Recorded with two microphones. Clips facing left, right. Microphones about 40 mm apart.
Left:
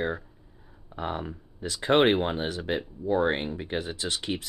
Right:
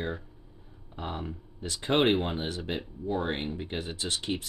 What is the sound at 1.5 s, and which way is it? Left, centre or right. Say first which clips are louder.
Speech: left 4 dB; left.